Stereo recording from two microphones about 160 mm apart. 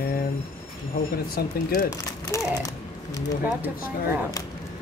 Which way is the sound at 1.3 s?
70° left (ahead or behind).